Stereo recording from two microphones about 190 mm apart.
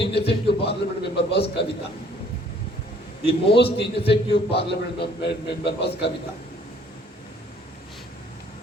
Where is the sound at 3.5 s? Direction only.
60° left (ahead or behind).